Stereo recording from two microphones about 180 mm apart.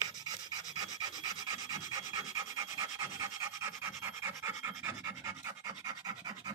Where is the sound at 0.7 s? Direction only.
20° right (ahead or behind).